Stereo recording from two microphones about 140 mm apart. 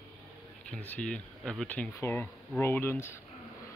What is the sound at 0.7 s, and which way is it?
Speech, 10° left (ahead or behind).